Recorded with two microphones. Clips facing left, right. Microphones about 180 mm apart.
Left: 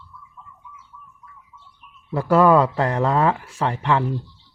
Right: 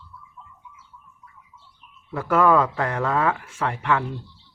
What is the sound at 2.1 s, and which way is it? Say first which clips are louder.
Speech: left 3 dB; 35° left (ahead or behind).